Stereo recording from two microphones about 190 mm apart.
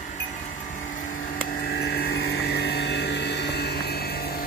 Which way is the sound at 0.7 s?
45° left (ahead or behind).